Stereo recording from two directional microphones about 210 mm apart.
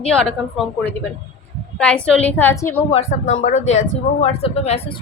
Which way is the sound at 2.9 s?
30° left (ahead or behind).